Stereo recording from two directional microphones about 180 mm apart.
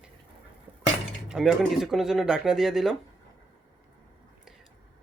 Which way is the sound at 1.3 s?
Centre (ahead or behind).